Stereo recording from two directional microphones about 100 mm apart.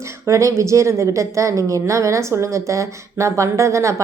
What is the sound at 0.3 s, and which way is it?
A woman's voice, 30° right (ahead or behind).